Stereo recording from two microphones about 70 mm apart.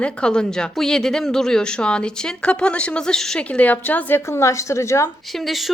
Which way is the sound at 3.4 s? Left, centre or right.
Left.